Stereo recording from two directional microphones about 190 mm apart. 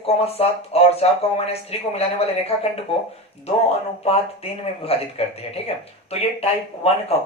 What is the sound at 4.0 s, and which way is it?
Speech, 30° left (ahead or behind).